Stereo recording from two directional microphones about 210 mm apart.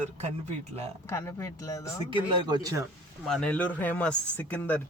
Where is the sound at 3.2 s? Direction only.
5° left (ahead or behind).